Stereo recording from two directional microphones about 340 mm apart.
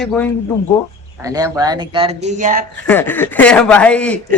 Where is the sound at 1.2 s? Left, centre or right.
Centre.